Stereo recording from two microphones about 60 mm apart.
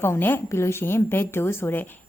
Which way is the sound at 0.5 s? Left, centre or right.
Left.